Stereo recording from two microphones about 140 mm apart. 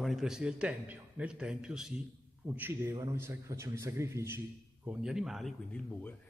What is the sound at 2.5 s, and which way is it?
A man's voice, 15° right (ahead or behind).